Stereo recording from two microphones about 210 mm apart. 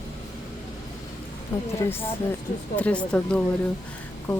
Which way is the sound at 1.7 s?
10° left (ahead or behind).